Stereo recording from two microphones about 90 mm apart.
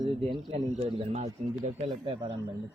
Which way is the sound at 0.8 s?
90° right.